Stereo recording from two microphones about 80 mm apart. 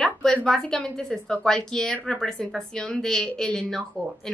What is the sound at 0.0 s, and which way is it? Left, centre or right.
A woman's voice, centre.